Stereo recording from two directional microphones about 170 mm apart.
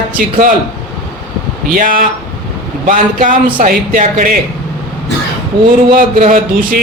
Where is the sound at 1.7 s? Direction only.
55° right (ahead or behind).